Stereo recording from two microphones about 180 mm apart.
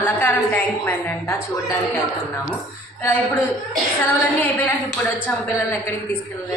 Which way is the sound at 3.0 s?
10° left (ahead or behind).